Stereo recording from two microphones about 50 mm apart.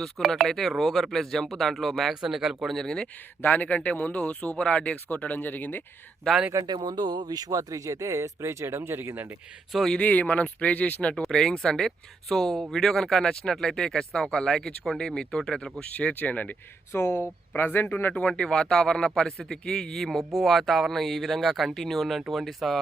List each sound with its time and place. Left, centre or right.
0.0 s speech: centre
2.7 s speech: centre
3.4 s speech: left
6.5 s speech: right
7.8 s speech: right
9.0 s a man's voice: right
10.0 s speech: left
11.2 s speech: centre
15.8 s speech: left
16.9 s speech: left
17.6 s a man's voice: left
18.1 s speech: left
20.1 s speech: centre